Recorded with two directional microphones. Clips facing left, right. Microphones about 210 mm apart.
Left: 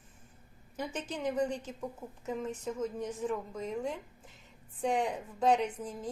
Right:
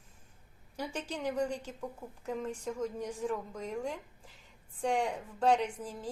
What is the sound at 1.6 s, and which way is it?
A woman's voice, 5° left (ahead or behind).